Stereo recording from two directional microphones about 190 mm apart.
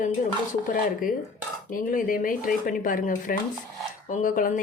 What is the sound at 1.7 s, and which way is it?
A woman's voice, 45° left (ahead or behind).